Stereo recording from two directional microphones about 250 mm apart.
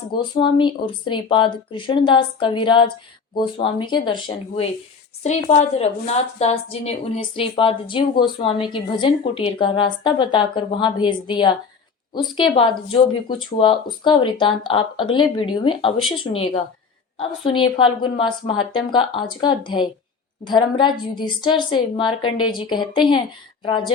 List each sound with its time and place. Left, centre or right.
0.1 s a woman's voice: left